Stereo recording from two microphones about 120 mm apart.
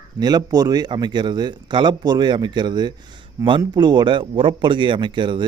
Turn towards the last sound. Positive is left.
turn(degrees=-40)  # may be behind; listen again after turning